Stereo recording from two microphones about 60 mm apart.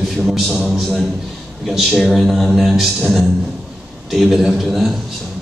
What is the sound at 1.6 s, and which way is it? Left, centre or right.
A man's voice, centre.